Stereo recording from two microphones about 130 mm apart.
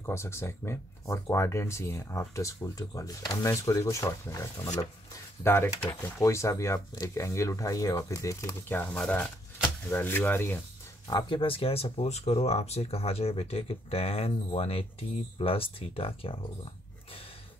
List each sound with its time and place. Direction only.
0.0 s speech: 20° left (ahead or behind)
11.1 s speech: 35° left (ahead or behind)